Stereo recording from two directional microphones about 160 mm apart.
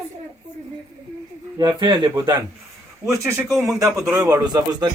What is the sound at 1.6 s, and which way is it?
A man's voice, 30° right (ahead or behind).